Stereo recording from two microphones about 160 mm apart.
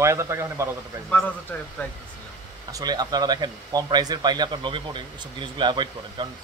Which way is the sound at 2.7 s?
25° right (ahead or behind).